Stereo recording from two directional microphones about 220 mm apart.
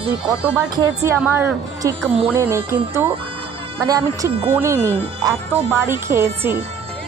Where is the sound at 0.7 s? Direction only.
10° right (ahead or behind).